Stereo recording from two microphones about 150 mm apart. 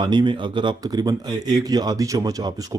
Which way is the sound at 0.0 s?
30° right (ahead or behind).